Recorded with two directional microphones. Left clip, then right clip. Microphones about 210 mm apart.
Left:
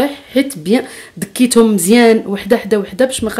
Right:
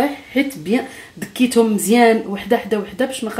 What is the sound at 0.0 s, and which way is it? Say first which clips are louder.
Speech: left 4 dB; 45° left (ahead or behind).